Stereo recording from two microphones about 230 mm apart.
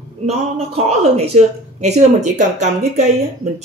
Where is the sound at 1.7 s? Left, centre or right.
Right.